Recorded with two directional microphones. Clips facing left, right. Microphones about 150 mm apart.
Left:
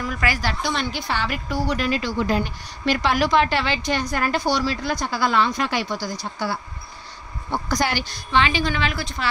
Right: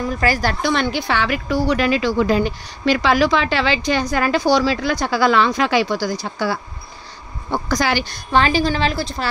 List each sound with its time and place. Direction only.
0.0 s a woman's voice: 35° right (ahead or behind); by 8.1 s 90° right
8.1 s a woman's voice: 40° right (ahead or behind)